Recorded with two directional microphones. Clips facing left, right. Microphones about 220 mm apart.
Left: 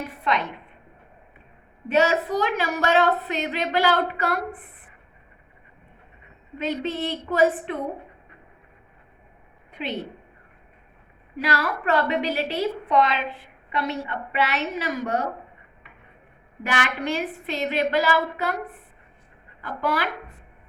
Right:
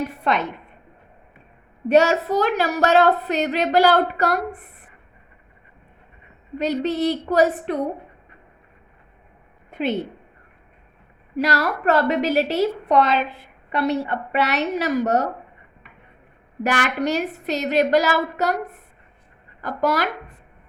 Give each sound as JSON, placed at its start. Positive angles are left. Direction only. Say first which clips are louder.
{"t": 1.9, "sound": "speech", "louder": "right 4 dB", "side_deg": -40}
{"t": 6.6, "sound": "speech", "louder": "right 5 dB", "side_deg": -40}
{"t": 9.6, "sound": "a sound", "louder": "right 8 dB", "side_deg": -45}
{"t": 11.3, "sound": "a woman's voice", "louder": "right 4 dB", "side_deg": -40}
{"t": 16.6, "sound": "speech", "louder": "right 5 dB", "side_deg": -40}